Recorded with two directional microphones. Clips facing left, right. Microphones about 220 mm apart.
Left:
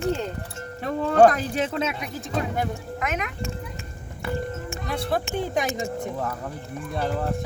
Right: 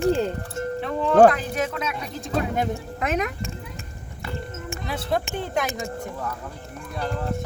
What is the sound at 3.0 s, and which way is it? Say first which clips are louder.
Speech: right 5 dB; 35° right (ahead or behind).